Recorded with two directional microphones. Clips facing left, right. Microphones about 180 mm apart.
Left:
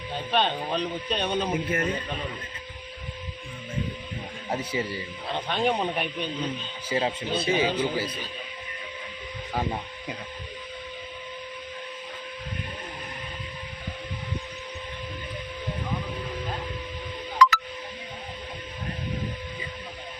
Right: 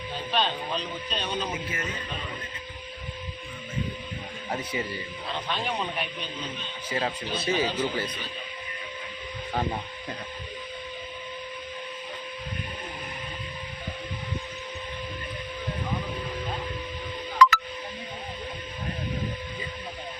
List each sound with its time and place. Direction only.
0.3 s speech: 55° left (ahead or behind)
4.5 s speech: 30° left (ahead or behind)
5.5 s speech: 50° left (ahead or behind)
6.9 s speech: 25° left (ahead or behind)
7.8 s speech: 10° left (ahead or behind)
17.3 s music: 55° right (ahead or behind)